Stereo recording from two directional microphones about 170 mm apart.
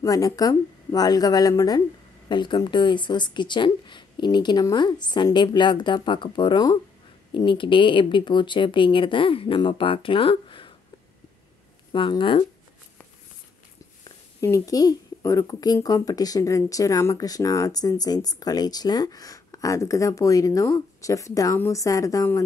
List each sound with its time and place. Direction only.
0.0 s speech: 20° left (ahead or behind)
11.9 s speech: 30° left (ahead or behind)
14.0 s speech: 20° left (ahead or behind)